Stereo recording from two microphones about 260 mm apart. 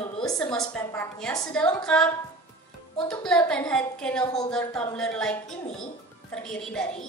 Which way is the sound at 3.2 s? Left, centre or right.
Centre.